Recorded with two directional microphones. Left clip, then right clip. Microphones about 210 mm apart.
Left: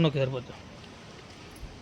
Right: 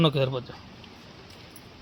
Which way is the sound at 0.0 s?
25° right (ahead or behind).